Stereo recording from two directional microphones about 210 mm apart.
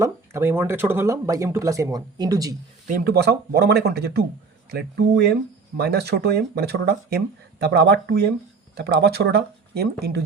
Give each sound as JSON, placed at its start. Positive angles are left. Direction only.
{"t": 0.0, "sound": "speech", "side_deg": -10}
{"t": 2.8, "sound": "speech", "side_deg": -40}